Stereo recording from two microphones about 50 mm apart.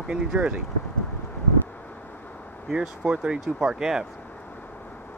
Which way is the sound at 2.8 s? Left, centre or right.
Centre.